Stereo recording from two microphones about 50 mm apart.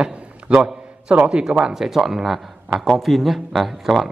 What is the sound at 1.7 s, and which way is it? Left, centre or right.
Speech, centre.